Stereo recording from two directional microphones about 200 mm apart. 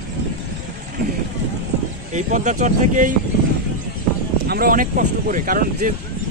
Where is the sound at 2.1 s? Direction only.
35° right (ahead or behind).